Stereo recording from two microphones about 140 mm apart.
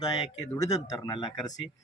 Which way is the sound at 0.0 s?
30° left (ahead or behind).